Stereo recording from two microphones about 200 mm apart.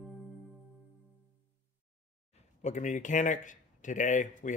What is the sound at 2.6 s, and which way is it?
Speech, 35° left (ahead or behind).